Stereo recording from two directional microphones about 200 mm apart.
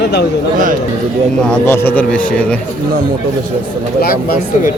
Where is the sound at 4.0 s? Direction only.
50° left (ahead or behind).